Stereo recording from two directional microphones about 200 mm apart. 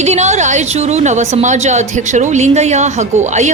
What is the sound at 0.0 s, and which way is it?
A woman's voice, 35° right (ahead or behind).